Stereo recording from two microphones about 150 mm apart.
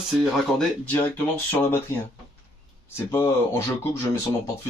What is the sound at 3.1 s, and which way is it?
Speech, 15° left (ahead or behind).